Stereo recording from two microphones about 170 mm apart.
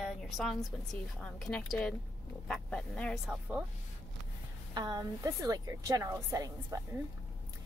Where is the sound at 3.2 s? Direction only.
10° right (ahead or behind).